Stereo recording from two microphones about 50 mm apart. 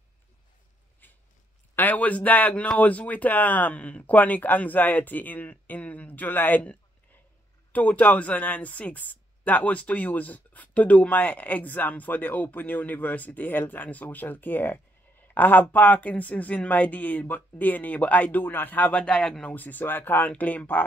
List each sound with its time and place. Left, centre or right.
1.0 s a sound: left
1.8 s speech: left
7.7 s speech: left
19.5 s speech: left